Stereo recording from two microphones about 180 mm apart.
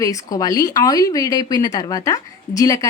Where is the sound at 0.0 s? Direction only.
20° left (ahead or behind).